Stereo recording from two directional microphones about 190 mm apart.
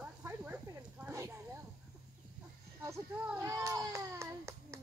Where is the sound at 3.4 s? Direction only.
15° right (ahead or behind).